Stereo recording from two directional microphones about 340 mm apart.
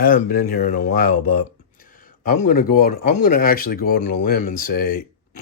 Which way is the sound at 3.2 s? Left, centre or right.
Left.